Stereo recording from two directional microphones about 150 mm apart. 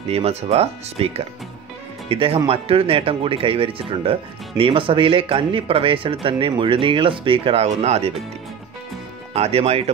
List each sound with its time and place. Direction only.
0.1 s speech: 45° right (ahead or behind)
9.3 s speech: 40° right (ahead or behind)